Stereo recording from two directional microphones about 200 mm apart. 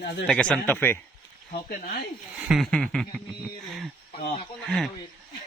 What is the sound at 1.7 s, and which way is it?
Speech, 45° left (ahead or behind).